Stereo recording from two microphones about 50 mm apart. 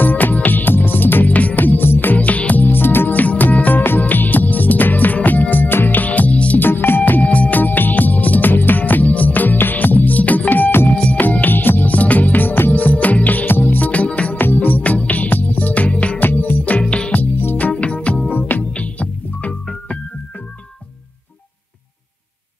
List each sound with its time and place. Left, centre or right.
0.0 s music: left
2.1 s music: left
6.6 s music: left
11.0 s music: left
14.3 s music: left
16.2 s music: left
18.3 s music: left